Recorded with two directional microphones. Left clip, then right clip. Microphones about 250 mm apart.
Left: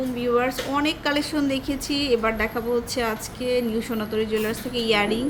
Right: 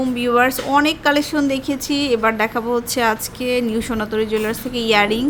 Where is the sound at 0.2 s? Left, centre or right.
Right.